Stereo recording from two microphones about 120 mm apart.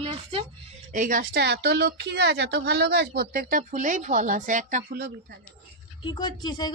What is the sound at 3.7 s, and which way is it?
A woman's voice, 90° right.